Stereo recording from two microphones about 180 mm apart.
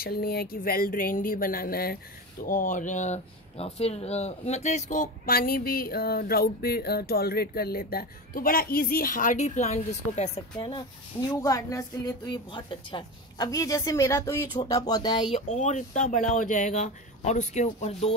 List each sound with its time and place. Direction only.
0.0 s speech: 60° left (ahead or behind); by 10.8 s 30° left (ahead or behind)
11.4 s a woman's voice: 20° left (ahead or behind)
15.3 s speech: 40° left (ahead or behind)